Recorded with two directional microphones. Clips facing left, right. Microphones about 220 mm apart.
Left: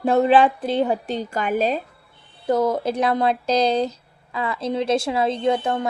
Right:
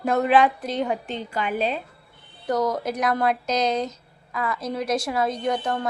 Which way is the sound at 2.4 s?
25° left (ahead or behind).